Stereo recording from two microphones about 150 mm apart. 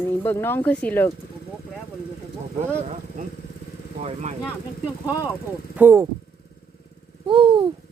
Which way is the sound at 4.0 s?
50° right (ahead or behind).